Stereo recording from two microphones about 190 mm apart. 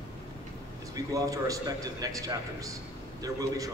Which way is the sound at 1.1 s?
20° right (ahead or behind).